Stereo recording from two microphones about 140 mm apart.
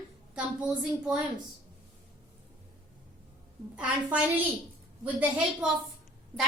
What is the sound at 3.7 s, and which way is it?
Speech, 10° right (ahead or behind).